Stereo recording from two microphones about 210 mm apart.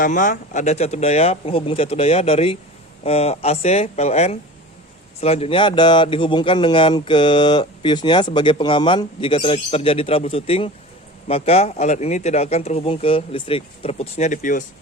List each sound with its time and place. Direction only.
0.0 s speech: 40° left (ahead or behind)